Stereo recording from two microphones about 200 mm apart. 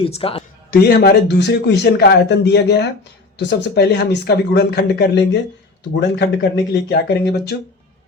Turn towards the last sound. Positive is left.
turn(degrees=55)  # may be behind; listen again after turning